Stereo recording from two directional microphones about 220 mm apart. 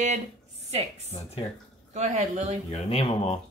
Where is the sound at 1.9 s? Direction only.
30° right (ahead or behind).